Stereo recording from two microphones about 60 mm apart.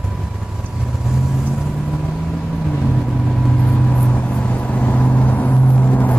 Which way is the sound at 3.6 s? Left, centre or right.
Left.